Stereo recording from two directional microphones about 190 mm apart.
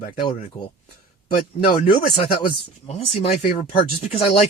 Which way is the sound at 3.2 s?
40° left (ahead or behind).